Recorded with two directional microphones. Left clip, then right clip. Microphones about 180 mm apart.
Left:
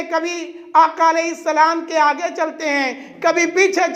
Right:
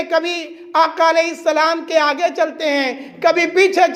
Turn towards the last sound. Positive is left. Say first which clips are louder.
# right 2 dB
turn(degrees=-15)  # may be behind; listen again after turning